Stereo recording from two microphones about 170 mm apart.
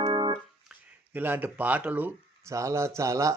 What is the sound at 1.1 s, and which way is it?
Speech, 10° right (ahead or behind).